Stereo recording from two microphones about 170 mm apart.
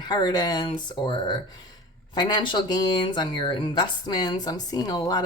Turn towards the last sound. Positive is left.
turn(degrees=25)  # may be behind; listen again after turning